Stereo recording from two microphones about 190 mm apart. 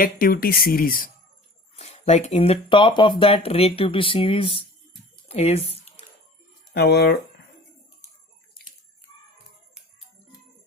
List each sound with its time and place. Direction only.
0.0 s speech: 50° left (ahead or behind)
1.7 s speech: 35° left (ahead or behind)
5.3 s squish: 30° left (ahead or behind)
6.7 s speech: 60° left (ahead or behind)